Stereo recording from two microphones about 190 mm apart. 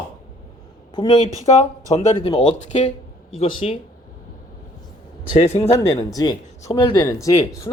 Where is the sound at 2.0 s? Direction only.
35° left (ahead or behind).